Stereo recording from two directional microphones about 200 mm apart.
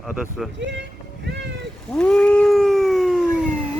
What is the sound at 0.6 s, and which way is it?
Speech, 60° right (ahead or behind).